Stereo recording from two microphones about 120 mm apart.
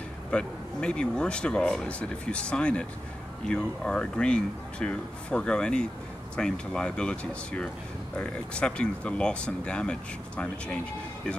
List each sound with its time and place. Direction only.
0.3 s speech: 10° left (ahead or behind)